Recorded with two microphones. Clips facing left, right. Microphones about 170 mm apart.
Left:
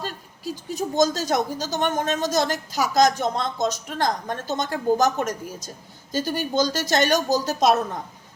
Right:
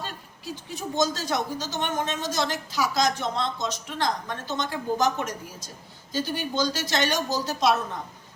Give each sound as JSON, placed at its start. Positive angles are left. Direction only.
{"t": 0.0, "sound": "speech", "side_deg": 40}